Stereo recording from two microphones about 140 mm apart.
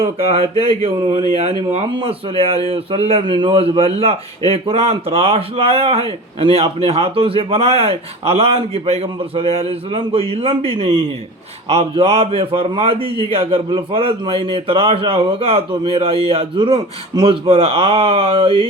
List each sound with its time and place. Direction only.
0.3 s a man's voice: 45° right (ahead or behind)
1.9 s a man's voice: 40° right (ahead or behind)